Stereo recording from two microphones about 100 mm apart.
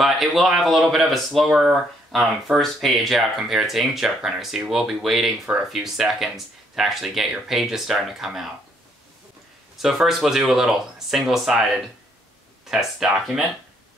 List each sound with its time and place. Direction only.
0.0 s speech: centre (ahead or behind)
9.8 s speech: 5° right (ahead or behind)